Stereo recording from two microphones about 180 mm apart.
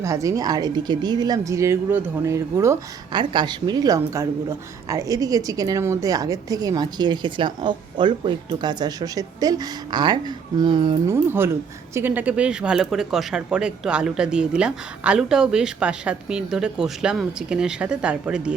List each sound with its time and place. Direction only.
0.0 s speech: 20° right (ahead or behind)
11.0 s speech: 15° right (ahead or behind)